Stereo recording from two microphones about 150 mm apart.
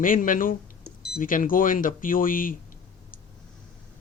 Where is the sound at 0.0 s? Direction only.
65° left (ahead or behind).